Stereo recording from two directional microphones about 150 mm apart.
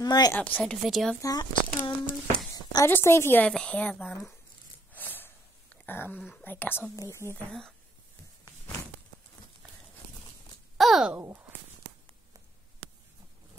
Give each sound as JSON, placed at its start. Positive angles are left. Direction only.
{"t": 0.0, "sound": "speech", "side_deg": 25}
{"t": 0.3, "sound": "a woman's voice", "side_deg": 10}
{"t": 1.2, "sound": "speech", "side_deg": 25}
{"t": 2.5, "sound": "a sound", "side_deg": 25}
{"t": 2.9, "sound": "a woman's voice", "side_deg": 15}
{"t": 4.9, "sound": "snort", "side_deg": 10}
{"t": 5.9, "sound": "a woman's voice", "side_deg": 15}
{"t": 10.8, "sound": "a sound", "side_deg": 0}
{"t": 11.1, "sound": "speech", "side_deg": -15}